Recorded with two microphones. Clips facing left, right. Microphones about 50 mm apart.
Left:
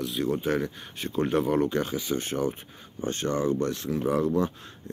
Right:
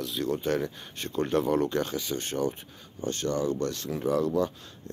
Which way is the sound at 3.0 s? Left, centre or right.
Left.